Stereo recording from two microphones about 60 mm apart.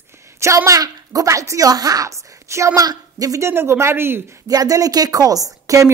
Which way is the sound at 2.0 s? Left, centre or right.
Right.